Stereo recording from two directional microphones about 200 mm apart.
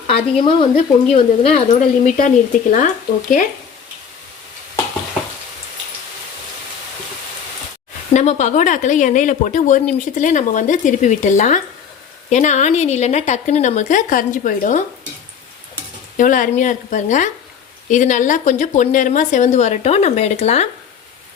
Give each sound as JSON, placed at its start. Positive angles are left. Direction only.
{"t": 1.1, "sound": "speech", "side_deg": 30}
{"t": 2.1, "sound": "speech", "side_deg": 40}
{"t": 8.1, "sound": "speech", "side_deg": 35}
{"t": 16.1, "sound": "speech", "side_deg": 40}